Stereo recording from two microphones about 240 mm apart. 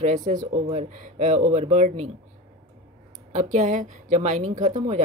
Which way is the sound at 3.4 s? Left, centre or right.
Right.